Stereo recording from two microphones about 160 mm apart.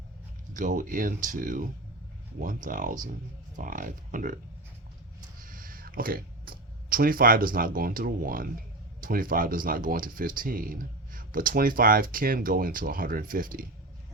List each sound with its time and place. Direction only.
0.5 s speech: 55° right (ahead or behind)
5.4 s a sound: 60° right (ahead or behind)
9.0 s speech: 60° right (ahead or behind)